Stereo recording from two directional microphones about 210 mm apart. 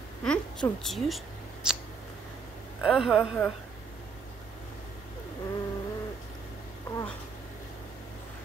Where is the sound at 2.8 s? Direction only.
5° right (ahead or behind).